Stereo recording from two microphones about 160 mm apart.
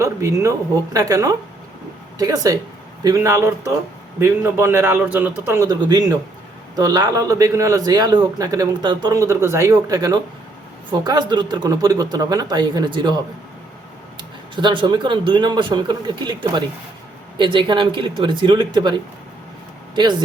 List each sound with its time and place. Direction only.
0.0 s a man's voice: 20° right (ahead or behind)
20.0 s a man's voice: 30° right (ahead or behind)